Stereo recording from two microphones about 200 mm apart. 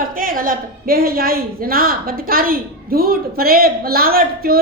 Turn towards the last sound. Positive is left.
turn(degrees=-50)  # may be behind; listen again after turning